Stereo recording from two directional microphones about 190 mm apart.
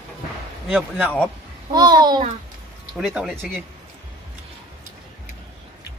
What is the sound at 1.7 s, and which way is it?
Speech, 20° right (ahead or behind).